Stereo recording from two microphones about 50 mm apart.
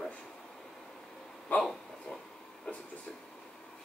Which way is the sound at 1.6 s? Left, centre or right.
Centre.